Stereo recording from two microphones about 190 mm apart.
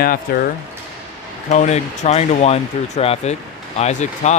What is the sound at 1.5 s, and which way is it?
Speech, 35° left (ahead or behind).